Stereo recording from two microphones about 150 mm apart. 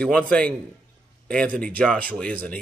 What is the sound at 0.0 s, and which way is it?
Speech, 5° left (ahead or behind).